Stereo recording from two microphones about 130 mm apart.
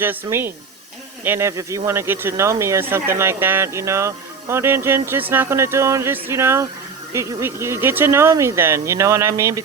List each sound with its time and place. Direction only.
0.0 s speech: 15° right (ahead or behind)